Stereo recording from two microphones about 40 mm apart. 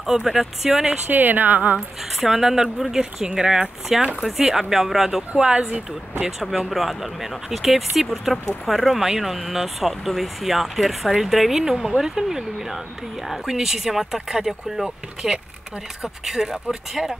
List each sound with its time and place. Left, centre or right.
0.0 s speech: centre
1.1 s a woman's voice: right
2.1 s speech: centre
5.3 s speech: right
6.5 s speech: centre